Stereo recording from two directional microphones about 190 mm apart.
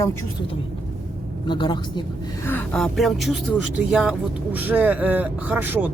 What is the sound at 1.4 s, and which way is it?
Speech, 25° left (ahead or behind).